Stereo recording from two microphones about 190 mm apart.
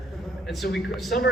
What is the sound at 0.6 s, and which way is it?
Speech, 50° left (ahead or behind).